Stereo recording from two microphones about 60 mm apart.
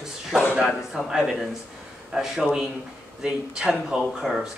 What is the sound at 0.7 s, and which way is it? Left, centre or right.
Speech, centre.